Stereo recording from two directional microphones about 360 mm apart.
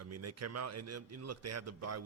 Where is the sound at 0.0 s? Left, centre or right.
Right.